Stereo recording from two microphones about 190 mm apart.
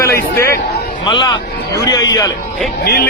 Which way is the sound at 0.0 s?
15° left (ahead or behind).